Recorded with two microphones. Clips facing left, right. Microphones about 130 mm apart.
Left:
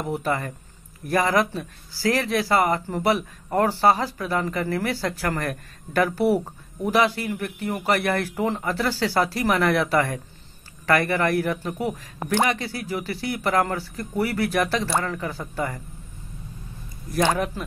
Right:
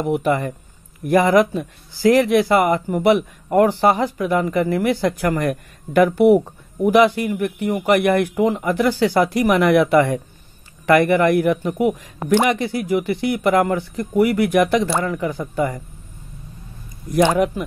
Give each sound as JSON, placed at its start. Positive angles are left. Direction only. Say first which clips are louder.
{"t": 0.1, "sound": "speech", "louder": "right 6 dB", "side_deg": -20}
{"t": 17.1, "sound": "speech", "louder": "right 6 dB", "side_deg": -20}